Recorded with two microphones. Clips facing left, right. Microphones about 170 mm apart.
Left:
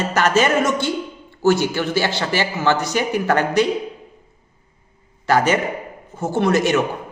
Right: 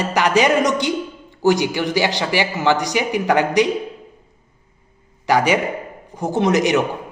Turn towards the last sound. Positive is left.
turn(degrees=-15)  # may be behind; listen again after turning